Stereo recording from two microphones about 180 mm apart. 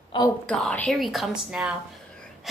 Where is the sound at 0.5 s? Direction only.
5° left (ahead or behind).